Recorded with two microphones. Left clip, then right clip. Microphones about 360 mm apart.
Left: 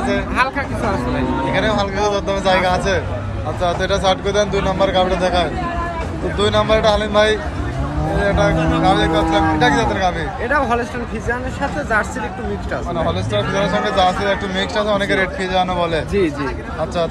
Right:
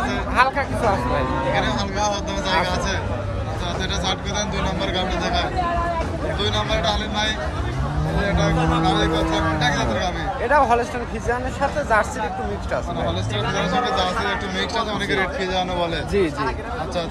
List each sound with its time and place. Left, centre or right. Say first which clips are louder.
0.4 s vehicle: right 4 dB; right
1.5 s vehicle: left 5 dB; centre
3.6 s a man's voice: left 9 dB; centre
6.4 s a man's voice: left 9 dB; centre
8.8 s a man's voice: left 5 dB; centre
10.5 s speech: right 1 dB; right
13.8 s a man's voice: left 6 dB; centre